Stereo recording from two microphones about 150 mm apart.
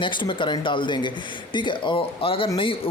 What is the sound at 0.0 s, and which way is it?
Speech, 35° left (ahead or behind).